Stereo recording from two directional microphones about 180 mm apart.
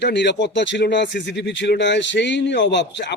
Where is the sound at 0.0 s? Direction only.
75° left (ahead or behind).